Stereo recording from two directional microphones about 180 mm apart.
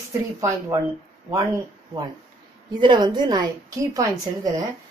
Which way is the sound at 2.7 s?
25° right (ahead or behind).